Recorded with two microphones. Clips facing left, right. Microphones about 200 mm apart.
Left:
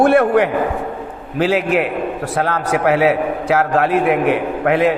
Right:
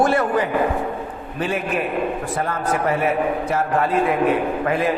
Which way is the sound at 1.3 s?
80° left.